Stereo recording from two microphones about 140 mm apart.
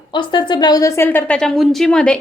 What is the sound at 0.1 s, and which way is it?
A woman's voice, 35° left (ahead or behind).